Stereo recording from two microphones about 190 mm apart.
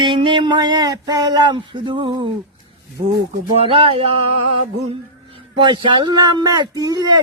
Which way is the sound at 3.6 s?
30° right (ahead or behind).